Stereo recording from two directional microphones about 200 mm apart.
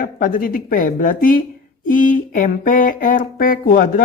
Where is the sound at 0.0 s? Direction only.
45° left (ahead or behind).